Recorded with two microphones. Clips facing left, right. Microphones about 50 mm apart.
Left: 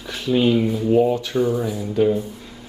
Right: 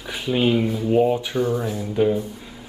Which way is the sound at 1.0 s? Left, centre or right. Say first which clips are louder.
Left 1 dB; centre.